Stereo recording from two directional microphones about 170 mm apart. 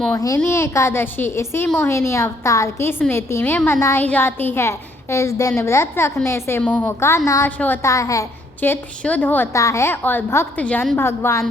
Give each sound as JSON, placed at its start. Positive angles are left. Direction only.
{"t": 0.3, "sound": "a woman's voice", "side_deg": 10}